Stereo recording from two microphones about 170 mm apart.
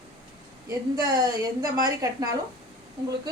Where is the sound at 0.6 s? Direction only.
20° right (ahead or behind).